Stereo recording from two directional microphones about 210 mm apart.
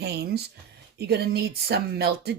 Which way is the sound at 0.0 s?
50° right (ahead or behind).